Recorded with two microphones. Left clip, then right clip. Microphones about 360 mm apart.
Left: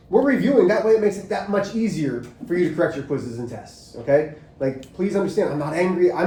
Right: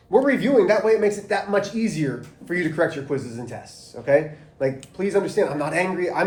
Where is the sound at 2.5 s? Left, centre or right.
Right.